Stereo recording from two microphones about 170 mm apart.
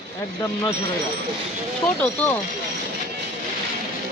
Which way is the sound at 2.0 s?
10° left (ahead or behind).